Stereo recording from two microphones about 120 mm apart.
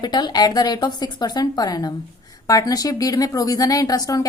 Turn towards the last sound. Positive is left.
turn(degrees=30)  # may be behind; listen again after turning